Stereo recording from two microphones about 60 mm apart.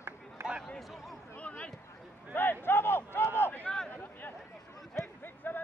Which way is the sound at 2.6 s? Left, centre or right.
Left.